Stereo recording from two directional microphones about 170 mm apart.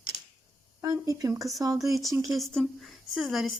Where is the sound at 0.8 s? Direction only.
20° right (ahead or behind).